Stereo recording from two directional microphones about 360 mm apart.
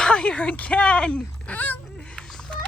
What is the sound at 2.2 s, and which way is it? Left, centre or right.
Music, centre.